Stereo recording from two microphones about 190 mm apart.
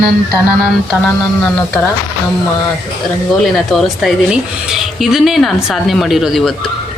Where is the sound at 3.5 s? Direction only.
Centre (ahead or behind).